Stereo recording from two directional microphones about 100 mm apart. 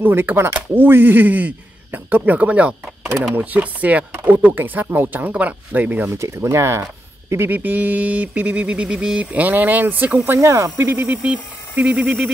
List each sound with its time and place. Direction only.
0.0 s speech: 20° right (ahead or behind)
6.0 s speech: 30° right (ahead or behind)
7.4 s speech: 20° right (ahead or behind)
10.9 s speech: 15° right (ahead or behind)